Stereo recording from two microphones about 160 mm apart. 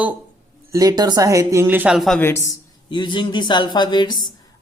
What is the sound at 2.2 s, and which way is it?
Speech, 20° left (ahead or behind).